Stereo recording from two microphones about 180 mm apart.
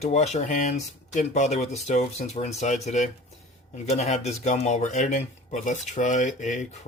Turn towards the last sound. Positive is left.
turn(degrees=45)  # may be behind; listen again after turning